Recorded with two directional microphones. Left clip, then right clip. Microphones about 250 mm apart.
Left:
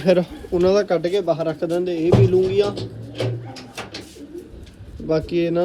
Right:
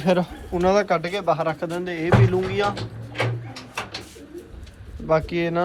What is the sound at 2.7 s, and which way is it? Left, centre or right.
Speech, centre.